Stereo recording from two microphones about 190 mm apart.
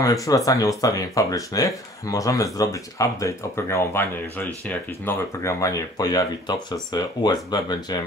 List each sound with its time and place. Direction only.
0.0 s speech: 15° left (ahead or behind)